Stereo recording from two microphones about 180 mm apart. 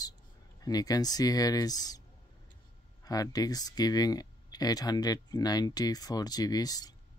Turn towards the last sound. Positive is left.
turn(degrees=20)  # may be behind; listen again after turning